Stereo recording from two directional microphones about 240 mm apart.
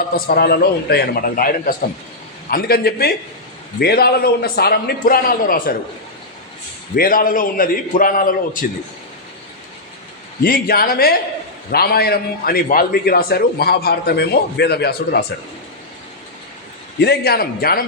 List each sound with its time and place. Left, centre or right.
0.3 s a man's voice: left
6.9 s a man's voice: left
10.4 s a man's voice: left
17.0 s a man's voice: left